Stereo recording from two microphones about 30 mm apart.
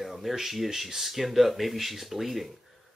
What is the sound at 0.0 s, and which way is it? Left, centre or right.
Speech, centre.